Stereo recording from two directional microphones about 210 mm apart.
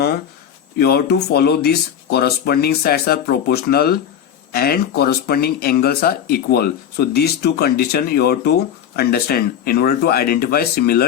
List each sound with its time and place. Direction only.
0.8 s speech: 50° left (ahead or behind)